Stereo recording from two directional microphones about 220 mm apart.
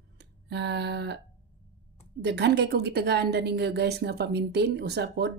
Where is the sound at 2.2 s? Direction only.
50° right (ahead or behind).